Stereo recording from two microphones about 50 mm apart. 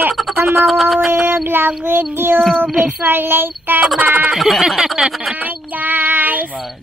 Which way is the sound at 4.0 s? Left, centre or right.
Right.